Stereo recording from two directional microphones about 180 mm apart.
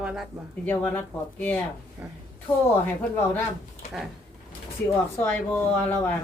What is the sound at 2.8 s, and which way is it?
Speech, 10° left (ahead or behind).